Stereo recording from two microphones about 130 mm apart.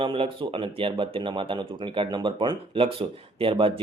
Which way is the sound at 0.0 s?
40° right (ahead or behind).